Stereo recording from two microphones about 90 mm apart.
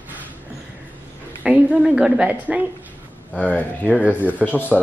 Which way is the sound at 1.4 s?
15° right (ahead or behind).